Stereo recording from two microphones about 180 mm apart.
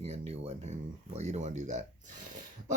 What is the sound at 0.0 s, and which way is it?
Speech, 35° right (ahead or behind).